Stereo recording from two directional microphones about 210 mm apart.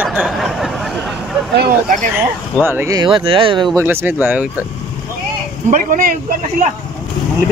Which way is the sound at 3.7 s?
10° right (ahead or behind).